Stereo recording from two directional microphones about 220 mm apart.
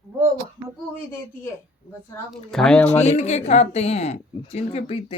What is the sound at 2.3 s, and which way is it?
Speech, centre (ahead or behind).